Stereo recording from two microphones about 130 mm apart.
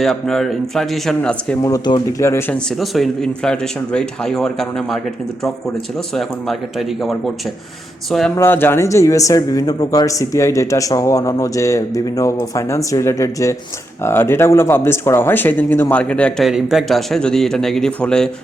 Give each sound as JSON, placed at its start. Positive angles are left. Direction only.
{"t": 0.0, "sound": "speech", "side_deg": 0}
{"t": 1.6, "sound": "speech", "side_deg": 30}
{"t": 2.2, "sound": "speech", "side_deg": 20}
{"t": 2.6, "sound": "speech", "side_deg": 0}
{"t": 6.1, "sound": "speech", "side_deg": 0}
{"t": 8.4, "sound": "speech", "side_deg": 15}
{"t": 16.5, "sound": "speech", "side_deg": -5}